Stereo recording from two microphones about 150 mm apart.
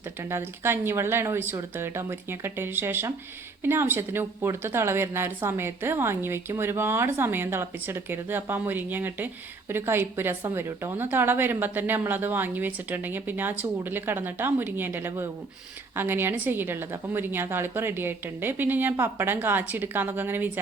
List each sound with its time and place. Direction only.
0.2 s a woman's voice: 15° right (ahead or behind)